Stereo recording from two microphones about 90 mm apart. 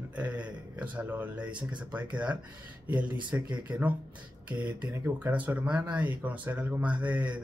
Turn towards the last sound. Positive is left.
turn(degrees=-15)  # may be behind; listen again after turning